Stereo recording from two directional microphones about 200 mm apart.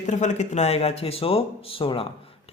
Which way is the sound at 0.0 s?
35° left (ahead or behind).